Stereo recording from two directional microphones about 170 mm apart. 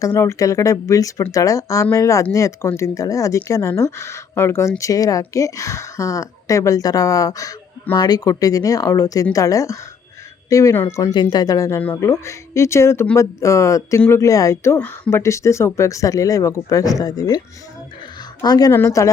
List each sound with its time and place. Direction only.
0.0 s a woman's voice: 15° left (ahead or behind)
18.4 s a woman's voice: 25° left (ahead or behind)